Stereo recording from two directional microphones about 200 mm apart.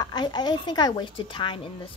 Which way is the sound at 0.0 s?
20° left (ahead or behind).